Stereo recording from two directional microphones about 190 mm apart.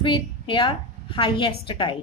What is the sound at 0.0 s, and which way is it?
A woman's voice, 25° left (ahead or behind).